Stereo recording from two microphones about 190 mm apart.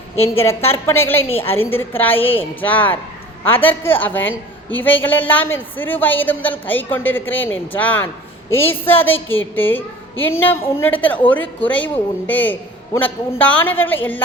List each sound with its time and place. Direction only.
0.2 s a woman's voice: 10° left (ahead or behind)
4.2 s a woman's voice: 90° left
4.8 s a woman's voice: 10° left (ahead or behind)